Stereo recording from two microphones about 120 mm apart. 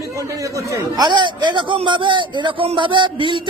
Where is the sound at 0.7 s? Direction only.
30° right (ahead or behind).